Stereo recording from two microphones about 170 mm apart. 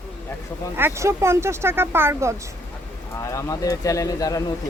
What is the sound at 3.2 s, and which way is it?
Speech, 20° left (ahead or behind).